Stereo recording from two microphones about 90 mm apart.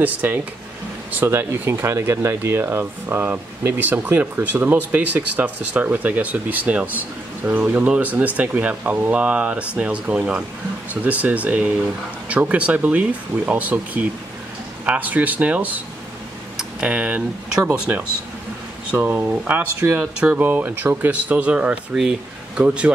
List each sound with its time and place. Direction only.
0.0 s speech: 20° right (ahead or behind)
16.5 s computer keyboard: 10° right (ahead or behind)
17.7 s speech: 15° right (ahead or behind)